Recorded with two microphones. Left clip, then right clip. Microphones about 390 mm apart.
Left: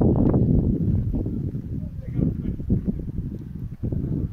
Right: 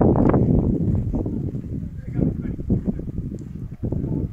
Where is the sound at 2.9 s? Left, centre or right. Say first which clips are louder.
Right 2 dB; right.